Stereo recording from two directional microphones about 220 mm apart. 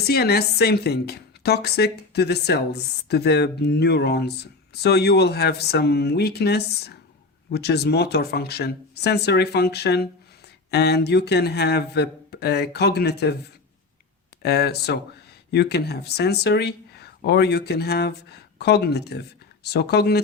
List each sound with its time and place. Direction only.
0.1 s a woman's voice: 45° left (ahead or behind)
14.4 s a woman's voice: 45° left (ahead or behind)